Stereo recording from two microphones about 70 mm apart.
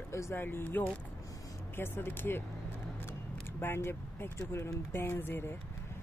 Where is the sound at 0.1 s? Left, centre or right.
Left.